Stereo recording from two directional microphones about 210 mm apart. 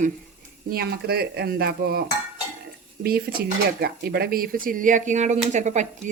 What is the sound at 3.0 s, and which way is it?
Speech, 45° right (ahead or behind).